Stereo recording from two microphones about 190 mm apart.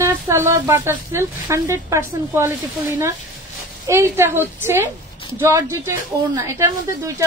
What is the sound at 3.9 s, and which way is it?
Speech, 15° right (ahead or behind).